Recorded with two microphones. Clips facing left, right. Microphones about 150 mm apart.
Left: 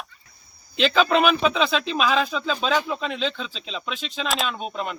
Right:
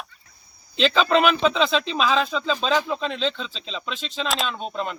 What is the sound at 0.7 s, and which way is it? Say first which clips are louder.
Speech: even; 5° left (ahead or behind).